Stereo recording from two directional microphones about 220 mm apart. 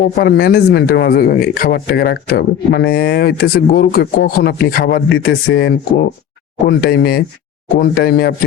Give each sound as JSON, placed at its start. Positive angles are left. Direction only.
{"t": 0.2, "sound": "speech", "side_deg": 45}